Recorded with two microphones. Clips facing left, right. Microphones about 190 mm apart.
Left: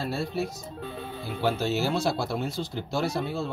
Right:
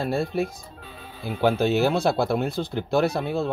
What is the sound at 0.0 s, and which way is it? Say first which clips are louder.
Speech: right 5 dB; 55° right (ahead or behind).